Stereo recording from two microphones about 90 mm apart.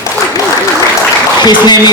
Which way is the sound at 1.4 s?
50° left (ahead or behind).